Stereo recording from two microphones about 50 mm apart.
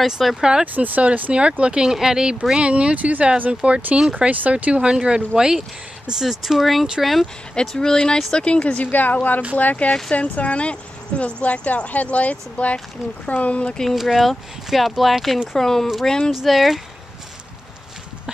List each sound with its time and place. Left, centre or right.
0.0 s speech: centre
0.4 s speech: centre
0.7 s speech: right
1.3 s speech: right
1.9 s speech: centre
7.6 s speech: centre
8.9 s speech: left
13.9 s speech: centre
15.5 s speech: centre